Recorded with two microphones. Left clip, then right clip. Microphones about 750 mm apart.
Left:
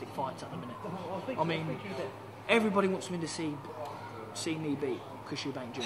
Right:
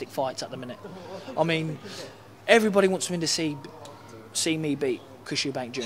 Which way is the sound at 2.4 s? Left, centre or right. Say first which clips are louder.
Right 8 dB; right.